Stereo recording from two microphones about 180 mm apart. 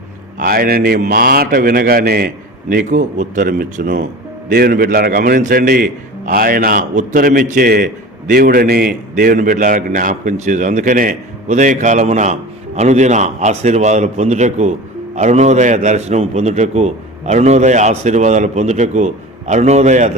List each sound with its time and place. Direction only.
0.3 s a man's voice: 55° right (ahead or behind)